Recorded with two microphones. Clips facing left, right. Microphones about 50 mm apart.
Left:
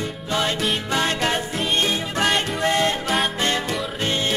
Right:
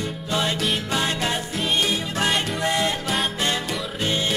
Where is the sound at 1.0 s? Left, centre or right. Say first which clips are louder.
Left 4 dB; left.